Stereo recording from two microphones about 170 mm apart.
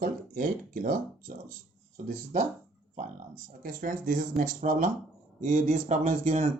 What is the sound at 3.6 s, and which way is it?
Speech, 55° right (ahead or behind).